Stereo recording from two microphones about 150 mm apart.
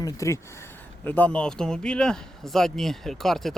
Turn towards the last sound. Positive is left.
turn(degrees=0)  # may be behind; listen again after turning